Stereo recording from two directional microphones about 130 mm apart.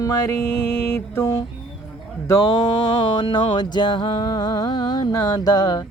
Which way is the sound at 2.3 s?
30° left (ahead or behind).